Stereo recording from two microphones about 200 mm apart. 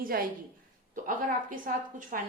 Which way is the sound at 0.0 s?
45° right (ahead or behind).